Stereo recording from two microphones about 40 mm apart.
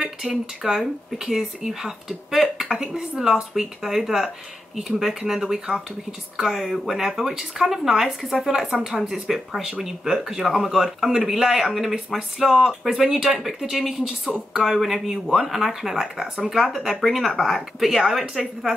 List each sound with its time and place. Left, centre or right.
0.2 s speech: centre
9.1 s speech: centre